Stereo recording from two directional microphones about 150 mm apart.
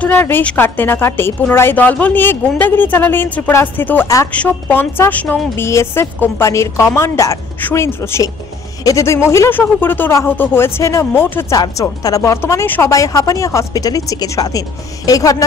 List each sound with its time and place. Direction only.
0.0 s a woman's voice: 10° left (ahead or behind)